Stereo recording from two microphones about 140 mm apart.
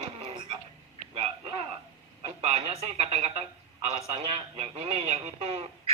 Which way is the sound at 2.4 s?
50° right (ahead or behind).